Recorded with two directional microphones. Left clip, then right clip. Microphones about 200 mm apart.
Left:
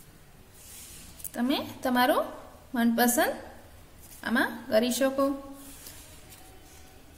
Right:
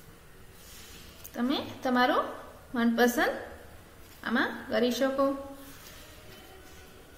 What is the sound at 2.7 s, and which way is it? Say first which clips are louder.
Speech: even; 35° left (ahead or behind).